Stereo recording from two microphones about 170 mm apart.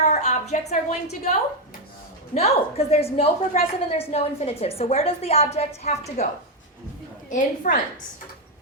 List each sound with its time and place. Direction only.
0.0 s a woman's voice: 45° left (ahead or behind)
7.3 s a woman's voice: 50° left (ahead or behind)